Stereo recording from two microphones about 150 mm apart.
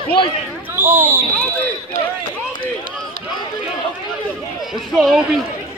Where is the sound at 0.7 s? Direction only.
15° right (ahead or behind).